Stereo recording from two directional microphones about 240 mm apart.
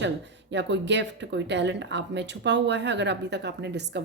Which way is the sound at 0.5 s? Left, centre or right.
Right.